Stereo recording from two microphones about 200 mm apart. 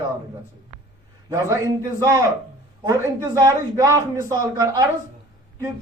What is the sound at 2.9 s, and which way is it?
A man's voice, 15° right (ahead or behind).